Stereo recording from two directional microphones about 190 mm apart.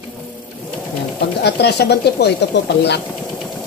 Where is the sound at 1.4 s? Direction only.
65° left (ahead or behind).